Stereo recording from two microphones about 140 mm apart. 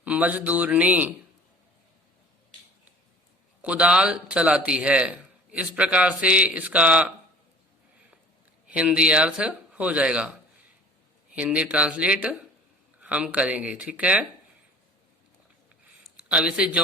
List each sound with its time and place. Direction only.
0.0 s a man's voice: 10° right (ahead or behind)
3.6 s a man's voice: 10° right (ahead or behind)
8.6 s a man's voice: 10° right (ahead or behind)
11.3 s a man's voice: 10° right (ahead or behind)
16.3 s a man's voice: 10° right (ahead or behind)